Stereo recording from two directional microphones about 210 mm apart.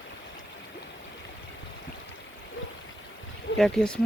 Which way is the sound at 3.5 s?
60° left (ahead or behind).